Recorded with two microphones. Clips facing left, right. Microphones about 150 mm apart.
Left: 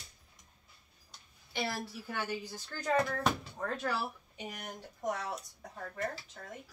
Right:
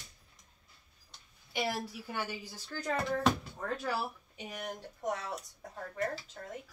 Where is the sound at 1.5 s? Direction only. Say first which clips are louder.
Right 2 dB; 10° right (ahead or behind).